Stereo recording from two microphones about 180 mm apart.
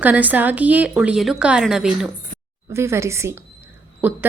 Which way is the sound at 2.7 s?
15° right (ahead or behind).